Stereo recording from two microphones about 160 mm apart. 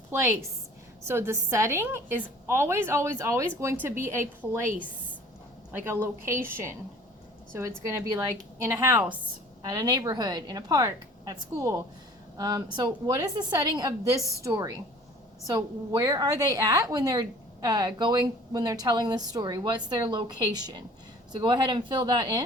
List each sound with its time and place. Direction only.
0.1 s a woman's voice: 15° right (ahead or behind)
5.7 s a woman's voice: 15° right (ahead or behind)
8.5 s a woman's voice: 15° right (ahead or behind)